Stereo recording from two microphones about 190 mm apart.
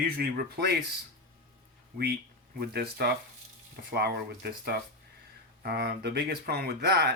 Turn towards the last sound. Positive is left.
turn(degrees=-60)  # may be behind; listen again after turning